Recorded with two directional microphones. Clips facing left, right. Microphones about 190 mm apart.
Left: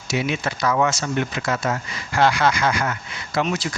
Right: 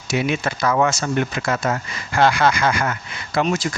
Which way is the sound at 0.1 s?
50° right (ahead or behind).